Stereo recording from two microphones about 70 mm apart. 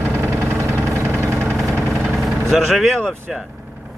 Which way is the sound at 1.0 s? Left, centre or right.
Right.